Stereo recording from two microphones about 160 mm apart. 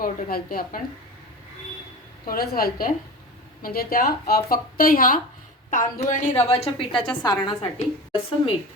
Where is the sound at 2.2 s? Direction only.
65° left (ahead or behind).